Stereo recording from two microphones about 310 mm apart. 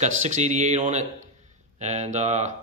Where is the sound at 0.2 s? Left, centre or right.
Right.